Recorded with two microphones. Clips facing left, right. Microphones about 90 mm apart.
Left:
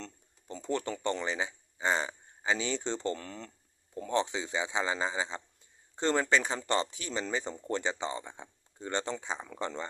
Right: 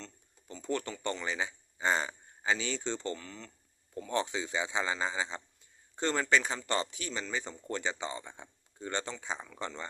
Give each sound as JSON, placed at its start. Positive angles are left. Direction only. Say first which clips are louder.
{"t": 0.4, "sound": "speech", "louder": "left 2 dB", "side_deg": 30}
{"t": 3.2, "sound": "speech", "louder": "left 4 dB", "side_deg": 50}
{"t": 3.9, "sound": "speech", "louder": "left 2 dB", "side_deg": 25}